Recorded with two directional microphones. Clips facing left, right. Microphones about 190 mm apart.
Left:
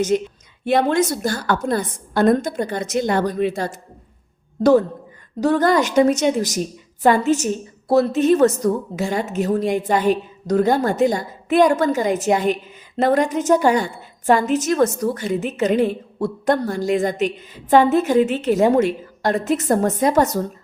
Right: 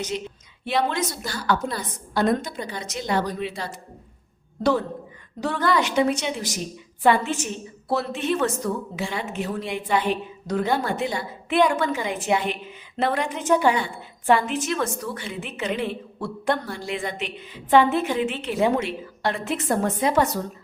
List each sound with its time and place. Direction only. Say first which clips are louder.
0.1 s a woman's voice: left 10 dB; 50° left (ahead or behind)
5.4 s a woman's voice: left 6 dB; 40° left (ahead or behind)